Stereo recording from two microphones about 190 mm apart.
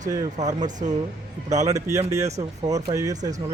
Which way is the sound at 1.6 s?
15° right (ahead or behind).